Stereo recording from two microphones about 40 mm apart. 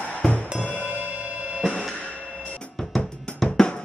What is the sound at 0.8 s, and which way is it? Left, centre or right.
Music, right.